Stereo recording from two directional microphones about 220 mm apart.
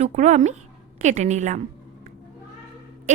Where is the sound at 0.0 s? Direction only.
30° right (ahead or behind).